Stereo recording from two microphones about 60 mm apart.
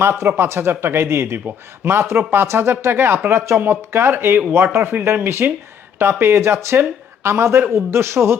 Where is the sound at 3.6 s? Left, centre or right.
Right.